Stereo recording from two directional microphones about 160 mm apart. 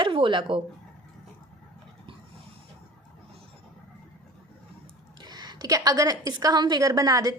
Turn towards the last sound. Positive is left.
turn(degrees=-20)  # may be behind; listen again after turning